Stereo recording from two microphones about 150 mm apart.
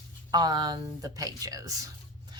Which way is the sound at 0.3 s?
25° right (ahead or behind).